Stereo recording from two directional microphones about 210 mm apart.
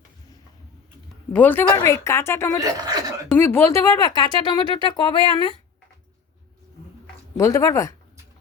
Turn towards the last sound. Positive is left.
turn(degrees=15)  # may be behind; listen again after turning